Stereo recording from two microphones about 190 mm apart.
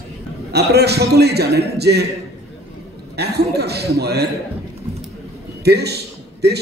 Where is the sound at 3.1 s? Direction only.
60° right (ahead or behind).